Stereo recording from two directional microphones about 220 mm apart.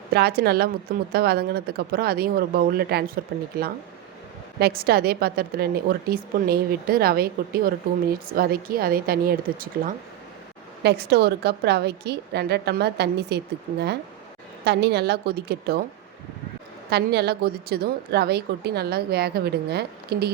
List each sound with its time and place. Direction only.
0.1 s a woman's voice: 45° right (ahead or behind)
16.9 s a woman's voice: 45° right (ahead or behind)